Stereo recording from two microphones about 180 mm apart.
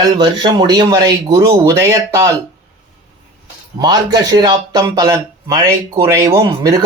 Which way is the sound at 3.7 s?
20° right (ahead or behind).